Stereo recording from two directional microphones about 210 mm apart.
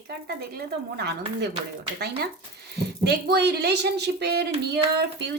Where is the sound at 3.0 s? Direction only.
50° right (ahead or behind).